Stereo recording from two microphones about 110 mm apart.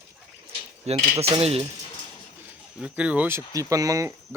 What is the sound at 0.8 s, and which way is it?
Speech, 65° right (ahead or behind).